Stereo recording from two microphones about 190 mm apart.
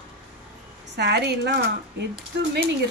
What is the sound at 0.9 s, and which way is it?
Speech, 65° right (ahead or behind).